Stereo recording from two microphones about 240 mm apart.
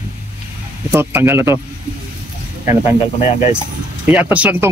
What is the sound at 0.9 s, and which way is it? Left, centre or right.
Speech, centre.